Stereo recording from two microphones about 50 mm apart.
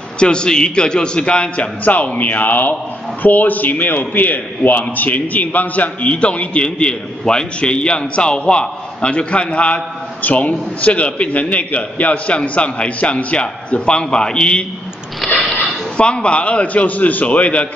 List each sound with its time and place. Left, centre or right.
0.2 s a man's voice: centre
15.1 s a sound: centre
16.0 s a man's voice: left